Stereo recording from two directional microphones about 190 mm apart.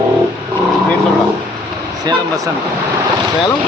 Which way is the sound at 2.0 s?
20° right (ahead or behind).